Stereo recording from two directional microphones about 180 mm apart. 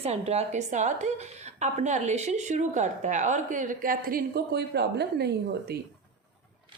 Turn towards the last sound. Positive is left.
turn(degrees=-65)  # may be behind; listen again after turning